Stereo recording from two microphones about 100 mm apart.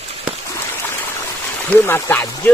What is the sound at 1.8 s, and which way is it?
Speech, 25° left (ahead or behind).